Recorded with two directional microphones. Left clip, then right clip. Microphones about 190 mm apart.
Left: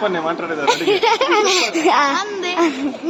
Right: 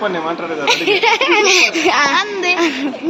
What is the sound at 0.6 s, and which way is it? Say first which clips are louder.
Speech: right 2 dB; 20° left (ahead or behind).